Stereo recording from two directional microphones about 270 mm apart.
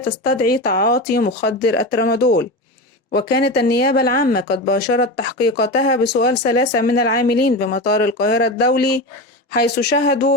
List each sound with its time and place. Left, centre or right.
0.0 s speech: left